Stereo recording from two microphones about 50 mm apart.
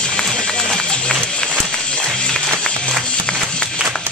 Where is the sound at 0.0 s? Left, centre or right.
Centre.